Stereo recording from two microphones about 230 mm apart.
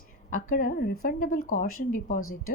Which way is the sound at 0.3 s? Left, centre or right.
Left.